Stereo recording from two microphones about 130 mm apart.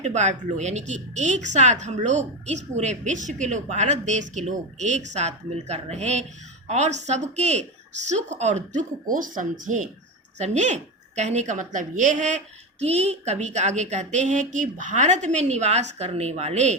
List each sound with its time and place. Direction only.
0.0 s a woman's voice: 65° right (ahead or behind)
10.3 s a woman's voice: 65° right (ahead or behind)
12.8 s a woman's voice: 55° right (ahead or behind)